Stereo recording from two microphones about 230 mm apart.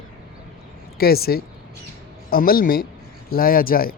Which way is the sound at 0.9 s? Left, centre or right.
Left.